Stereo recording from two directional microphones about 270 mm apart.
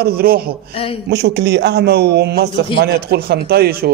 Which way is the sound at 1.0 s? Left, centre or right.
Right.